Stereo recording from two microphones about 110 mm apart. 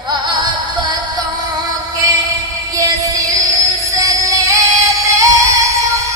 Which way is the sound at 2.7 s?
30° right (ahead or behind).